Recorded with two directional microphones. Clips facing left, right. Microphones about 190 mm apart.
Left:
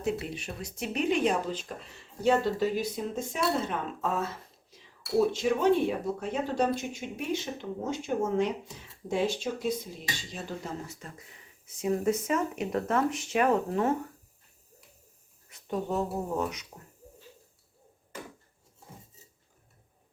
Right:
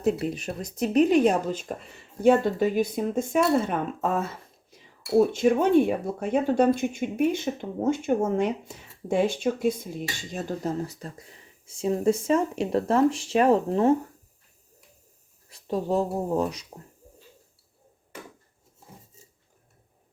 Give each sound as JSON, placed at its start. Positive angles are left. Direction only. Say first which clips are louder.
{"t": 0.0, "sound": "speech", "louder": "right 6 dB", "side_deg": -40}
{"t": 5.3, "sound": "speech", "louder": "right 5 dB", "side_deg": -50}
{"t": 15.4, "sound": "speech", "louder": "right 5 dB", "side_deg": -30}